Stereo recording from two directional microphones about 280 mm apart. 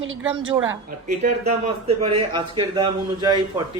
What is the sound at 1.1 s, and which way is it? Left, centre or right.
A man's voice, right.